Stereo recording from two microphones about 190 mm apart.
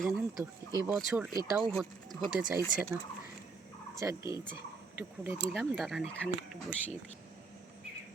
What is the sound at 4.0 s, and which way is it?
Speech, 15° right (ahead or behind).